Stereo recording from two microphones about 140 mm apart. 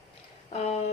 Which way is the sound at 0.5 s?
50° left (ahead or behind).